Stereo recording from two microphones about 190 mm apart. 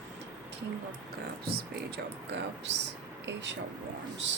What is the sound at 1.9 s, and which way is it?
Speech, 65° right (ahead or behind).